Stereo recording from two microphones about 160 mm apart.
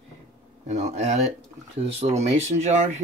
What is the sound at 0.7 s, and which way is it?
Speech, 45° right (ahead or behind).